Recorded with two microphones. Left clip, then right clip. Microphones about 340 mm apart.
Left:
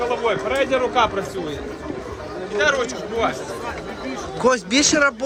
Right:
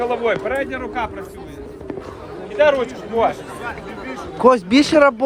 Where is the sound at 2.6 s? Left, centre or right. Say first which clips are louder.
Right 5 dB; right.